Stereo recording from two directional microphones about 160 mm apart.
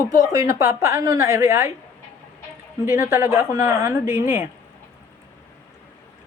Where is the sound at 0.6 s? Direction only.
15° right (ahead or behind).